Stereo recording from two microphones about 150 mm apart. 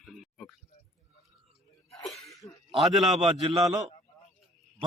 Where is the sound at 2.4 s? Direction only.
25° left (ahead or behind).